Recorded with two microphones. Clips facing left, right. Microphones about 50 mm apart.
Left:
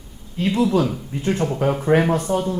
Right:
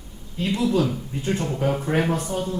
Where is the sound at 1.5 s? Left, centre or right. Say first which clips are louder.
Left 3 dB; centre.